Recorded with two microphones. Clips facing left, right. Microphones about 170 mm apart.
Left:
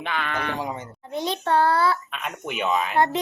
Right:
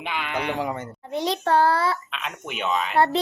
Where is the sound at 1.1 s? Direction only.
30° right (ahead or behind).